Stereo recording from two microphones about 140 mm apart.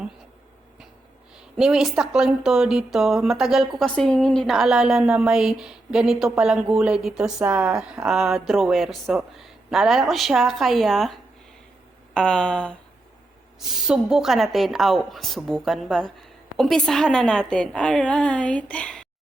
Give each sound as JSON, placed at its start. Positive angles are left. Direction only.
{"t": 1.4, "sound": "a woman's voice", "side_deg": -5}